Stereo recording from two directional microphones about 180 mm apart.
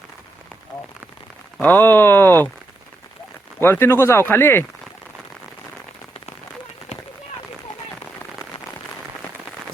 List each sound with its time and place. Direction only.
1.6 s speech: 10° left (ahead or behind)
3.6 s speech: 10° left (ahead or behind)